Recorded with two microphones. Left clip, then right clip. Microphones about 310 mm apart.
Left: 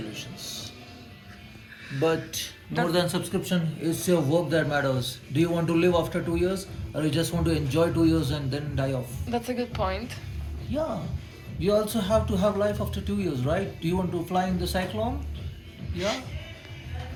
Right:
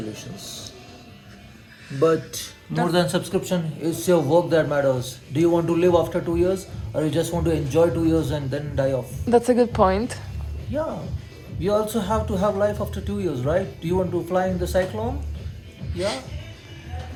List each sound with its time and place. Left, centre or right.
0.1 s music: right
2.0 s a woman's voice: right
3.4 s a man's voice: centre
9.3 s a woman's voice: right
10.7 s a man's voice: centre